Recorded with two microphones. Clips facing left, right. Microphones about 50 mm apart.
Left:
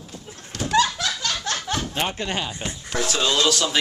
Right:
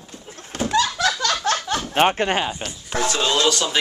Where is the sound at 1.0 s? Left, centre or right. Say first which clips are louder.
Right 6 dB; right.